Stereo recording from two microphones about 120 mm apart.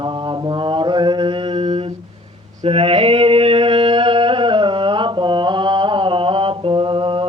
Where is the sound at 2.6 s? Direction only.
55° right (ahead or behind).